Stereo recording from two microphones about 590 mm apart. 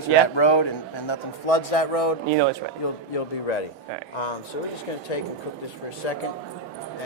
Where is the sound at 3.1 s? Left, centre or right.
Left.